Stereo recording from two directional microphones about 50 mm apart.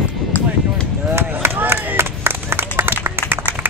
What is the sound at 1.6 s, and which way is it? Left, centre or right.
Clapping, right.